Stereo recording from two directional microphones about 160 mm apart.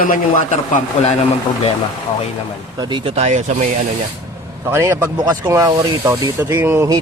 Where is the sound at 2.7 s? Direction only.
25° right (ahead or behind); by 3.5 s 45° right (ahead or behind).